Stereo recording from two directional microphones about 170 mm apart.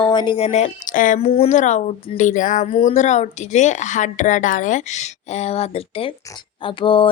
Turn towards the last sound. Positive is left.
turn(degrees=30)  # may be behind; listen again after turning